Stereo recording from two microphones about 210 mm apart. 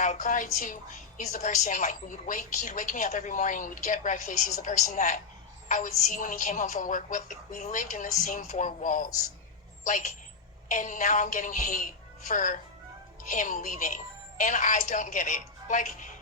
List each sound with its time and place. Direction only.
0.0 s a woman's voice: 35° left (ahead or behind)